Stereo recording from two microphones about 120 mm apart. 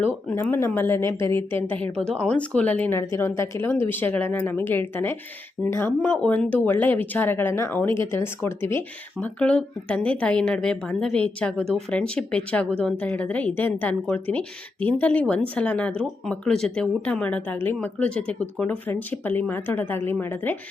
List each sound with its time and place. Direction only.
0.3 s a woman's voice: 20° left (ahead or behind)
1.7 s speech: 10° left (ahead or behind)
9.2 s speech: 10° left (ahead or behind)